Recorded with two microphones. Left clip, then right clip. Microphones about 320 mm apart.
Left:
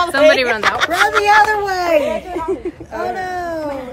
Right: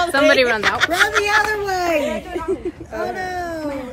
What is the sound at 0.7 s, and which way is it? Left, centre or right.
Speech, centre.